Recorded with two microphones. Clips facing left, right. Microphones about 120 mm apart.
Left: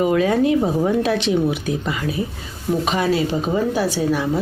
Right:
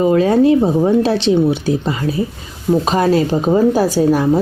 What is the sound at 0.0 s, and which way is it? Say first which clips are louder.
Speech: right 5 dB; 30° right (ahead or behind).